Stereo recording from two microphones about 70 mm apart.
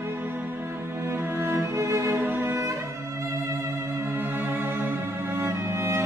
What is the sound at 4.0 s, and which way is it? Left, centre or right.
Cello, right.